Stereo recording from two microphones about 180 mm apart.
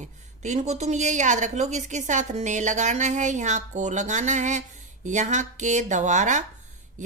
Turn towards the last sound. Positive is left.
turn(degrees=-40)  # may be behind; listen again after turning